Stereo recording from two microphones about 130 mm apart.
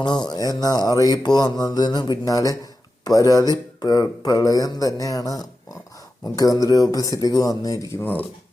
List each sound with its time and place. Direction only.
0.3 s mantra: 30° left (ahead or behind)
3.0 s speech: 25° left (ahead or behind)
8.0 s speech: 15° left (ahead or behind)